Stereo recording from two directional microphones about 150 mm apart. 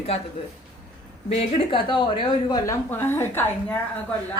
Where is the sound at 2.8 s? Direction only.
15° left (ahead or behind).